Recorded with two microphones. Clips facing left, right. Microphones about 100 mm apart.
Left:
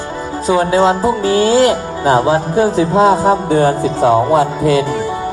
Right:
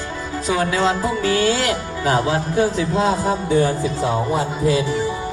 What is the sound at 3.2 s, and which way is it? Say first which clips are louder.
Music: left 6 dB; 55° left (ahead or behind).